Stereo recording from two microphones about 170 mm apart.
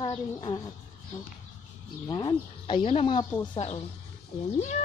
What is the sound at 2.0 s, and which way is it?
Speech, 25° left (ahead or behind).